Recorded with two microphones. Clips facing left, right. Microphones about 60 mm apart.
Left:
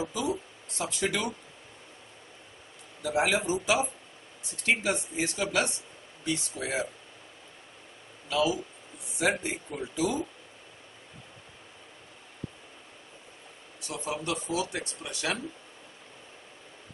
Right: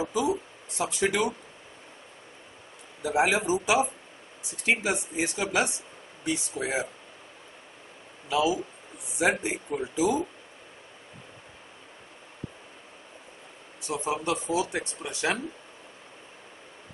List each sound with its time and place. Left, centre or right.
0.1 s speech: centre
3.0 s speech: centre
8.3 s speech: centre
13.8 s speech: right